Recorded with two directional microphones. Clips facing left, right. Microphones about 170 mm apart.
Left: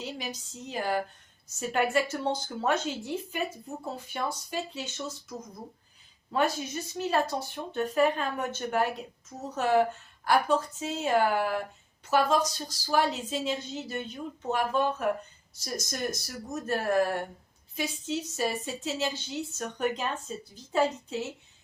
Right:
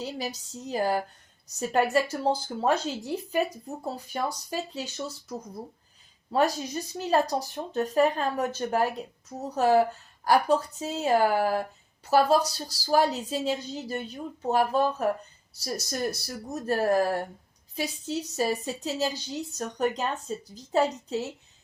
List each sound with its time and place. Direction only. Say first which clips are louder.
0.0 s speech: right 4 dB; 40° right (ahead or behind)